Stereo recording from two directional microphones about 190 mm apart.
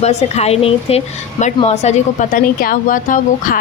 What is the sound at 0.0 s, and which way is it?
A woman's voice, 35° left (ahead or behind).